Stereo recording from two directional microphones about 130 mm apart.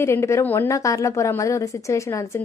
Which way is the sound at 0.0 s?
20° left (ahead or behind).